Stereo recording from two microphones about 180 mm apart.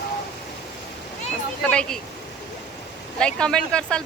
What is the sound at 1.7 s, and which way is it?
Speech, 5° left (ahead or behind).